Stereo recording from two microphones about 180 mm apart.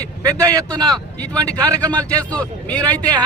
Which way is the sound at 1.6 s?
20° right (ahead or behind).